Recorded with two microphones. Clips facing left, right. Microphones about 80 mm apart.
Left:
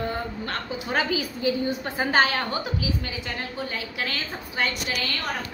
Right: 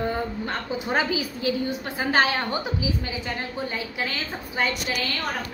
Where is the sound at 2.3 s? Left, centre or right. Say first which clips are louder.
Right 1 dB; centre.